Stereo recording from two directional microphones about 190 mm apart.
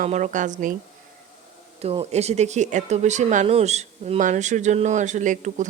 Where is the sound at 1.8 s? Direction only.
30° right (ahead or behind).